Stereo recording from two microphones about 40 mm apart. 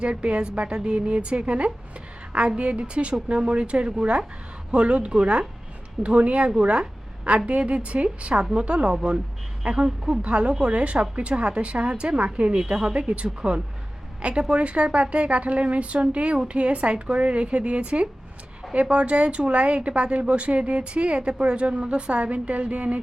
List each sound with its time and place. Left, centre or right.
0.0 s a woman's voice: right